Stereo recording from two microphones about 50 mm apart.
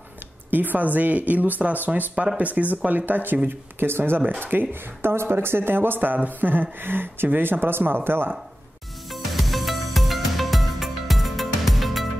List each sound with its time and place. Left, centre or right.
0.5 s speech: right
9.1 s music: centre